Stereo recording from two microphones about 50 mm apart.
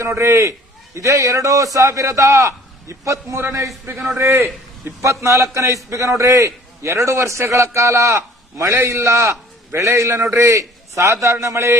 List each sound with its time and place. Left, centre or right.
0.2 s a man's voice: right
4.2 s a man's voice: right
4.8 s a man's voice: right
5.2 s a man's voice: right